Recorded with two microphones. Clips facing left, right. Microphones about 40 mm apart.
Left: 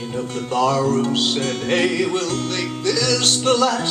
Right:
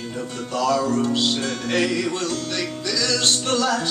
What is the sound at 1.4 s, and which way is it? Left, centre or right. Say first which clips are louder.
Music: left 3 dB; left.